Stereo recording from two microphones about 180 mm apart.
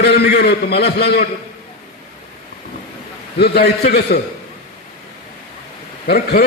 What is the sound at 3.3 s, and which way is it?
Speech, 65° left (ahead or behind).